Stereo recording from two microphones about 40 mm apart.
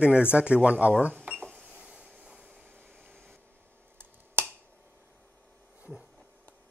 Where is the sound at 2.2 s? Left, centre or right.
Right.